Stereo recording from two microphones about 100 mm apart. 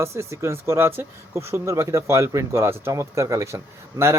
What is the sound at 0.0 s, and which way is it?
Speech, 30° right (ahead or behind).